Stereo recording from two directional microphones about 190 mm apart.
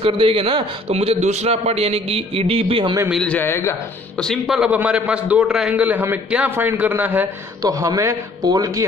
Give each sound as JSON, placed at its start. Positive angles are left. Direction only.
{"t": 0.0, "sound": "a man's voice", "side_deg": -30}
{"t": 3.1, "sound": "a man's voice", "side_deg": 5}
{"t": 4.2, "sound": "a man's voice", "side_deg": 0}